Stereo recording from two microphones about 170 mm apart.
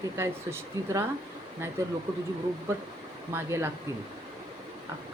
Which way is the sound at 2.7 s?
15° right (ahead or behind).